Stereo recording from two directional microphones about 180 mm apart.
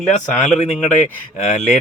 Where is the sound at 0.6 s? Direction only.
40° left (ahead or behind).